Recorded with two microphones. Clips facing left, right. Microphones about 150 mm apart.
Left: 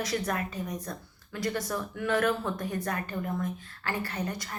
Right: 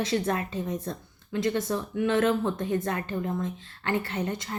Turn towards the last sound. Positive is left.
turn(degrees=-25)  # may be behind; listen again after turning